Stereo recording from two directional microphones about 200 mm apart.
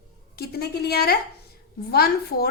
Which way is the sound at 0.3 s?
50° left (ahead or behind).